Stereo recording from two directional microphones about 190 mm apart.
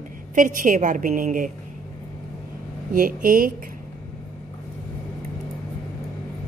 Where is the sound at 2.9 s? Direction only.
50° right (ahead or behind).